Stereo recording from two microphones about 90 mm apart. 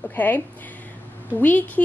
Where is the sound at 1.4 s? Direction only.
20° left (ahead or behind).